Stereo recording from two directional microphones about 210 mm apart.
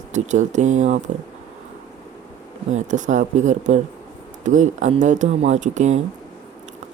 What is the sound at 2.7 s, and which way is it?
Speech, 35° right (ahead or behind).